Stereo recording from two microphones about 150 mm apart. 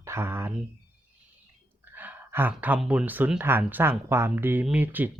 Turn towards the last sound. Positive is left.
turn(degrees=-10)  # may be behind; listen again after turning